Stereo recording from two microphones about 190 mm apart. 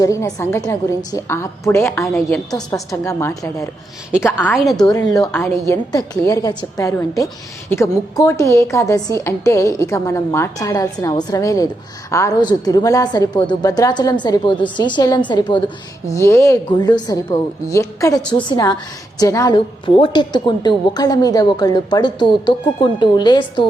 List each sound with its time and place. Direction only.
0.0 s a woman's voice: 15° left (ahead or behind)
4.5 s a woman's voice: centre (ahead or behind)
5.1 s a woman's voice: 15° left (ahead or behind)
18.2 s a woman's voice: 5° left (ahead or behind)
18.4 s a woman's voice: 20° left (ahead or behind)